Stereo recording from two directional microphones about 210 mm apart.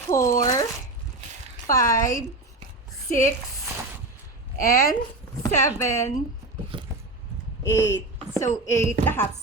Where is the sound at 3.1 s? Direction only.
35° left (ahead or behind).